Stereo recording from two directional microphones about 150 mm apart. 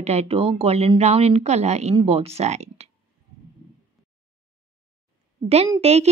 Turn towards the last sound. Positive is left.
turn(degrees=-45)  # may be behind; listen again after turning